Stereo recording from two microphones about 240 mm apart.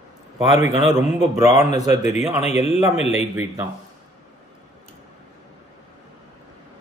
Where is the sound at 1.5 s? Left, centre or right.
Left.